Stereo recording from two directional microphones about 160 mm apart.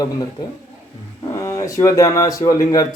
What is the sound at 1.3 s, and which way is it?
Speech, 20° left (ahead or behind).